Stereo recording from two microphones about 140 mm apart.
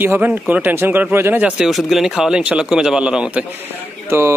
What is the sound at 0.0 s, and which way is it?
Speech, 15° right (ahead or behind).